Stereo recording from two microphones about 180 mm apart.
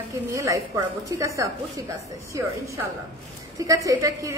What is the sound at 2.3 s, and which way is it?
A woman's voice, 15° right (ahead or behind).